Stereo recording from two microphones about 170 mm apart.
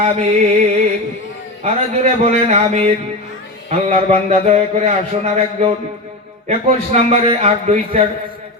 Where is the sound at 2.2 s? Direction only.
40° right (ahead or behind).